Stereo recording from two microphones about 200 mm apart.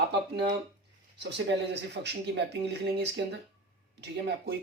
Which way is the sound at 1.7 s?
60° right (ahead or behind).